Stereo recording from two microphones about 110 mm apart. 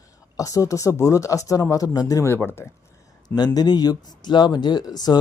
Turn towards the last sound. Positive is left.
turn(degrees=40)  # may be behind; listen again after turning